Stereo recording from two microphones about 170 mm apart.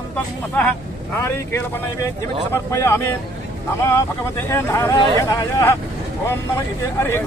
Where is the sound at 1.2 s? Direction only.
15° left (ahead or behind).